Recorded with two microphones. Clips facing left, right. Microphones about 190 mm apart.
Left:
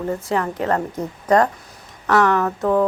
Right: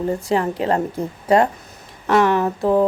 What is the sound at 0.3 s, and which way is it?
Speech, 25° right (ahead or behind).